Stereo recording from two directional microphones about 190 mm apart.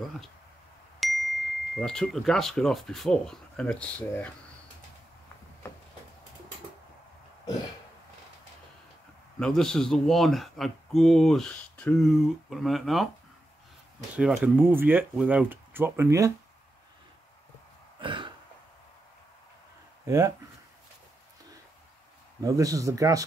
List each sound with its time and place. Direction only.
0.9 s speech: centre (ahead or behind)
9.4 s speech: 5° left (ahead or behind)
14.1 s speech: 5° right (ahead or behind)
17.9 s throat clearing: 25° right (ahead or behind)
20.1 s speech: 15° right (ahead or behind)
22.4 s speech: 20° right (ahead or behind)